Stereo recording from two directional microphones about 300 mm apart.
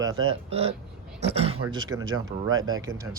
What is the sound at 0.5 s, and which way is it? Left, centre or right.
Speech, centre.